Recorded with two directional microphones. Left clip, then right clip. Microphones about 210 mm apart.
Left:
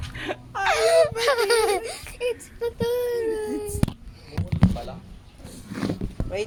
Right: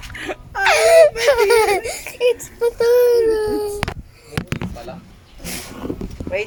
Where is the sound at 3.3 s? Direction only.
15° right (ahead or behind).